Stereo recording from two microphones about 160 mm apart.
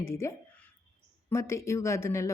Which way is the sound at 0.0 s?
15° left (ahead or behind).